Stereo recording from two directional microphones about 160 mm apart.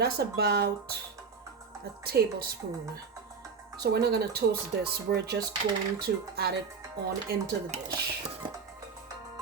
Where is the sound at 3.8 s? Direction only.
85° right.